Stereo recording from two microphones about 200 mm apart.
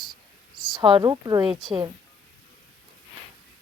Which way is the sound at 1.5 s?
Centre (ahead or behind).